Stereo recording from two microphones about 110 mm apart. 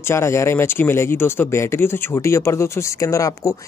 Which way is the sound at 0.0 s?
25° left (ahead or behind).